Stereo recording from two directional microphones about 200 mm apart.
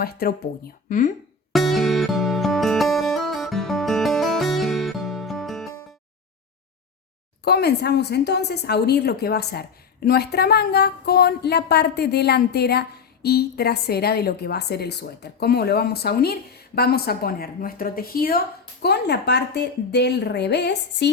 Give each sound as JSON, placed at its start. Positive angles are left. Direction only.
{"t": 0.0, "sound": "a woman's voice", "side_deg": 50}
{"t": 1.5, "sound": "music", "side_deg": 0}
{"t": 7.4, "sound": "a woman's voice", "side_deg": 55}